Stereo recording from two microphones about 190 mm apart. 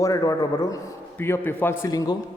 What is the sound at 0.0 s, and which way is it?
A man's voice, 20° left (ahead or behind).